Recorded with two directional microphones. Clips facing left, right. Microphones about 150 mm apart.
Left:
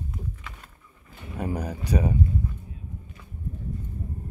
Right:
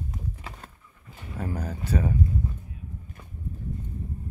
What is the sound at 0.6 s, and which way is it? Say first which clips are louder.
Pigeon: right 5 dB; 40° right (ahead or behind).